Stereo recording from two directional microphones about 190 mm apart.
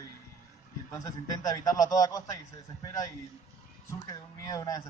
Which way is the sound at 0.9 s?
20° left (ahead or behind).